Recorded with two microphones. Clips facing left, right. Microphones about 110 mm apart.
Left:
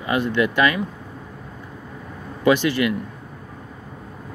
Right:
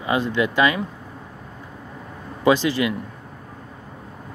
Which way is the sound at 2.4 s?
30° right (ahead or behind).